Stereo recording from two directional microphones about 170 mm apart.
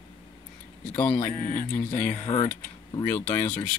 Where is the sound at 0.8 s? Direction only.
5° left (ahead or behind).